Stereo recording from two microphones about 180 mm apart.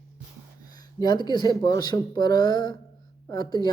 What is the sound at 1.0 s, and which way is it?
Speech, 25° left (ahead or behind).